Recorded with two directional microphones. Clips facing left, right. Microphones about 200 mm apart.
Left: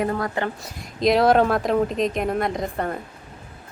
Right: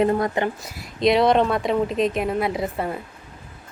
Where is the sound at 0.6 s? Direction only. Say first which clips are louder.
Right 1 dB; centre (ahead or behind).